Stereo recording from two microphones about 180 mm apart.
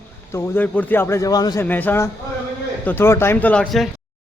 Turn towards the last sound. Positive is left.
turn(degrees=5)  # may be behind; listen again after turning